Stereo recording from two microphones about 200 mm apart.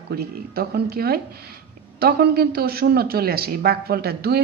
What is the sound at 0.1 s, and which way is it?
Speech, 50° right (ahead or behind).